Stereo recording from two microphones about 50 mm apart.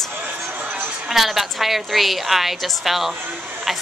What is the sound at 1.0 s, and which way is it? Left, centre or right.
Speech, centre.